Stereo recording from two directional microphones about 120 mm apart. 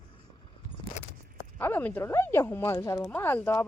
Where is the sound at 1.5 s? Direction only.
15° left (ahead or behind).